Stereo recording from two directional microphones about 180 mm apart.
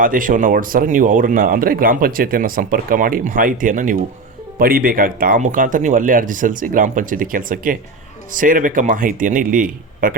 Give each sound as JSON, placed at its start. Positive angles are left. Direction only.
{"t": 0.0, "sound": "speech", "side_deg": -50}